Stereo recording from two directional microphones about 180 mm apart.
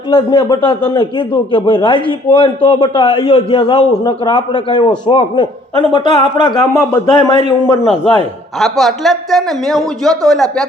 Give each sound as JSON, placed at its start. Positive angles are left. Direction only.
{"t": 0.1, "sound": "speech", "side_deg": 25}
{"t": 8.5, "sound": "a man's voice", "side_deg": 0}